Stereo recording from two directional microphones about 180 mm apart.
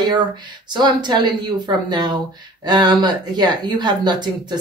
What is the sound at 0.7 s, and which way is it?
A woman's voice, 25° right (ahead or behind).